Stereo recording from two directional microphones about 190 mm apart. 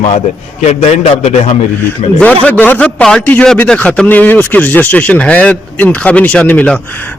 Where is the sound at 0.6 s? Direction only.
35° left (ahead or behind).